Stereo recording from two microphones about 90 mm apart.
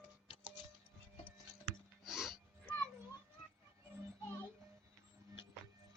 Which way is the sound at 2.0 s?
5° right (ahead or behind).